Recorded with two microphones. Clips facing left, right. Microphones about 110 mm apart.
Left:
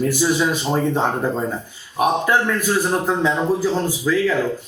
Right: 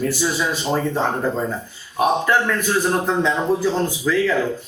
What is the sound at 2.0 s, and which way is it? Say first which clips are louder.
Speech: even; 15° left (ahead or behind).